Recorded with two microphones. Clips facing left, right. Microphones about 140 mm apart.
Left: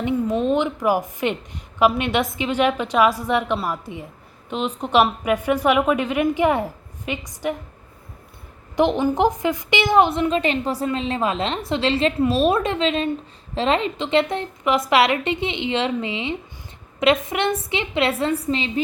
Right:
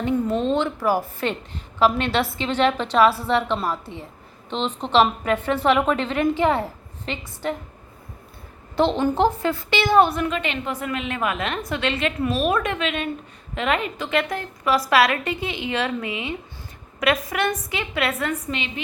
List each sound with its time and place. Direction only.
0.0 s a woman's voice: 15° left (ahead or behind)
8.7 s a woman's voice: 15° left (ahead or behind); by 18.7 s 30° left (ahead or behind)